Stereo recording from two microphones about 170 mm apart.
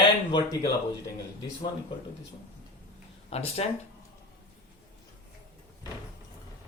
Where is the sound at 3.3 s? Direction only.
40° left (ahead or behind).